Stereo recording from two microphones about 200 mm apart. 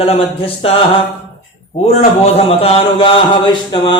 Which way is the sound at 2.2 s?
30° left (ahead or behind).